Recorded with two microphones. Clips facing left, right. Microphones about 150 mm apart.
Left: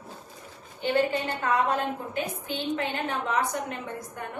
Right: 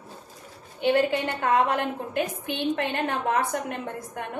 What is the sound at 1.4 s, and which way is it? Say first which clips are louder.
Speech: right 3 dB; 65° right (ahead or behind).